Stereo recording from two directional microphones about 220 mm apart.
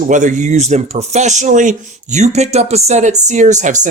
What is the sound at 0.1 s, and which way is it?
Speech, 35° right (ahead or behind).